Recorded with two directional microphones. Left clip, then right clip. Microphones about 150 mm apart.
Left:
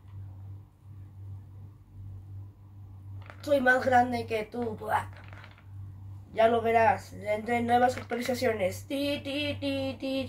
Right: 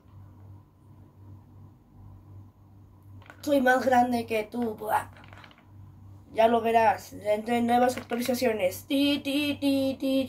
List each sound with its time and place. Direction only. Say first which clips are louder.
3.3 s speech: right 1 dB; 35° right (ahead or behind)
6.3 s speech: right 2 dB; 30° right (ahead or behind)